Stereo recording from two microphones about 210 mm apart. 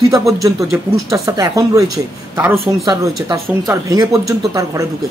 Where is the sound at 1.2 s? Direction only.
15° right (ahead or behind).